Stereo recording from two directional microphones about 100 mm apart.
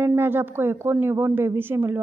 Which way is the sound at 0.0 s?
25° right (ahead or behind).